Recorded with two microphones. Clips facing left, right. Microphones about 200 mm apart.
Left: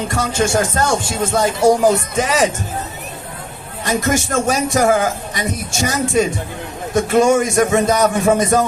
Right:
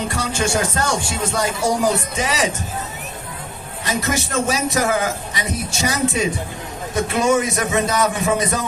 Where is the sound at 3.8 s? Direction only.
50° left (ahead or behind).